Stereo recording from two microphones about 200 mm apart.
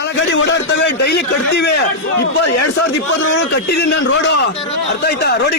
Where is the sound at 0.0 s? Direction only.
65° left (ahead or behind).